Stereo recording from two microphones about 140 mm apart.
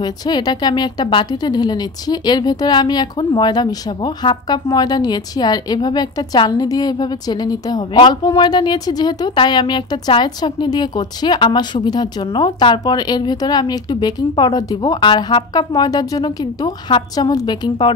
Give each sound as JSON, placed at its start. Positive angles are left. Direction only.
{"t": 0.0, "sound": "a woman's voice", "side_deg": 30}